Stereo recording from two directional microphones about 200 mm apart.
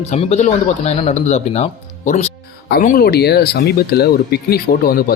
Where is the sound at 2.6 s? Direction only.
45° left (ahead or behind).